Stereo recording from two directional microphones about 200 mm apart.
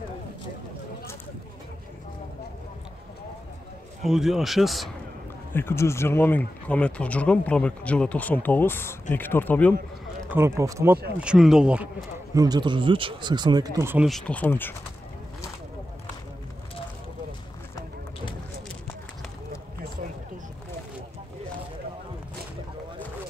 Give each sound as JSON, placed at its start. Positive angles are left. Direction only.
{"t": 4.0, "sound": "a man's voice", "side_deg": 0}
{"t": 5.5, "sound": "speech", "side_deg": 10}
{"t": 10.3, "sound": "speech", "side_deg": -15}
{"t": 11.1, "sound": "a man's voice", "side_deg": -5}
{"t": 12.4, "sound": "speech", "side_deg": -20}
{"t": 14.0, "sound": "speech", "side_deg": 5}